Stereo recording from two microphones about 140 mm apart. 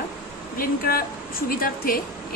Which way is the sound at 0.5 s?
90° left.